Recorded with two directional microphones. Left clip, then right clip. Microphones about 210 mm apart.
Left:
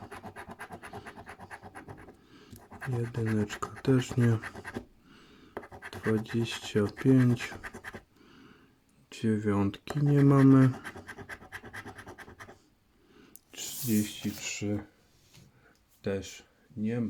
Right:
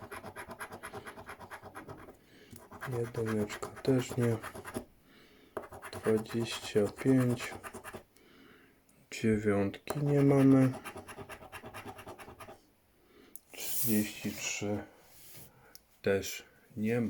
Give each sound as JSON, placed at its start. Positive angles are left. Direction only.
{"t": 0.9, "sound": "scratch", "side_deg": 25}
{"t": 2.4, "sound": "speech", "side_deg": 30}
{"t": 9.0, "sound": "a sound", "side_deg": 0}
{"t": 9.5, "sound": "speech", "side_deg": 20}
{"t": 11.5, "sound": "scratch", "side_deg": 25}
{"t": 13.9, "sound": "speech", "side_deg": 20}
{"t": 16.0, "sound": "speech", "side_deg": -5}